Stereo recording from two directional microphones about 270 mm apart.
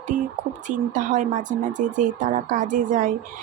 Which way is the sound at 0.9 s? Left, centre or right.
Right.